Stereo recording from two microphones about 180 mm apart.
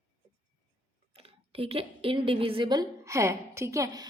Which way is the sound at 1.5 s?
30° right (ahead or behind).